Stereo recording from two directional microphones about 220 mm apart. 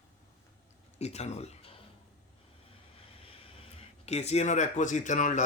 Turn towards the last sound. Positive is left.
turn(degrees=35)  # may be behind; listen again after turning